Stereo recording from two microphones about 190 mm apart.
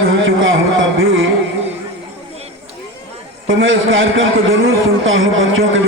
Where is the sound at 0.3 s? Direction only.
90° right.